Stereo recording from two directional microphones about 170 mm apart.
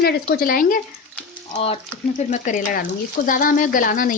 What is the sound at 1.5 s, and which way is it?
Speech, 35° left (ahead or behind).